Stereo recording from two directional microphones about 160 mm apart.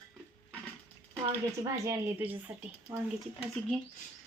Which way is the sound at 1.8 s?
15° right (ahead or behind).